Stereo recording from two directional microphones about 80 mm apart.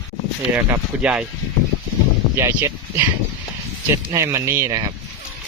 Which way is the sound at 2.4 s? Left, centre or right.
Right.